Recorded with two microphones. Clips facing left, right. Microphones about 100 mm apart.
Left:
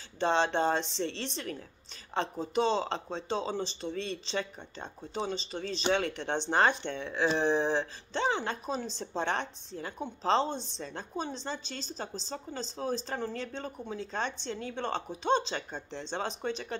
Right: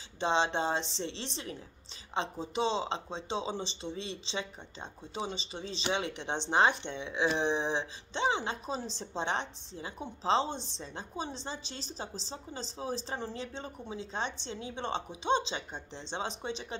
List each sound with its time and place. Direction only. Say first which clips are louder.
0.2 s speech: left 2 dB; 20° right (ahead or behind)